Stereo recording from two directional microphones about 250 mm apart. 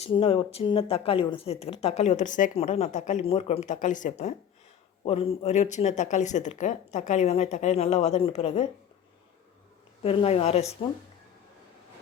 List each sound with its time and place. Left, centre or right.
0.0 s speech: left
10.0 s speech: left